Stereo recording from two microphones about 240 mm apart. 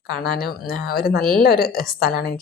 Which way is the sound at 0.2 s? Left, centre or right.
Left.